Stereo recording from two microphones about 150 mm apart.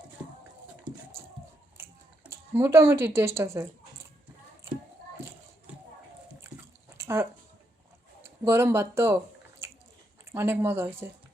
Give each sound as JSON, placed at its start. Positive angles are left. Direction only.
{"t": 2.3, "sound": "speech", "side_deg": -15}
{"t": 6.9, "sound": "a sound", "side_deg": -15}
{"t": 8.2, "sound": "speech", "side_deg": -15}
{"t": 10.3, "sound": "speech", "side_deg": -15}